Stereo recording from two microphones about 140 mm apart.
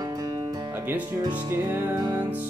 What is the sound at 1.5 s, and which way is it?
Music, 15° right (ahead or behind).